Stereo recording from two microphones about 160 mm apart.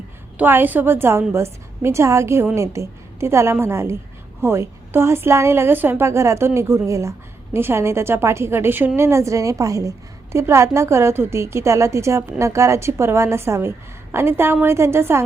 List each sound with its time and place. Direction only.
0.3 s a woman's voice: 10° right (ahead or behind)